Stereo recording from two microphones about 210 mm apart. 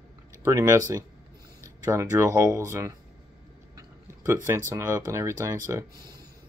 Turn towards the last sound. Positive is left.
turn(degrees=-20)  # may be behind; listen again after turning